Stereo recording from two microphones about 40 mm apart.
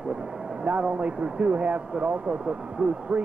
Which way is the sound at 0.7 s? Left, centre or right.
Right.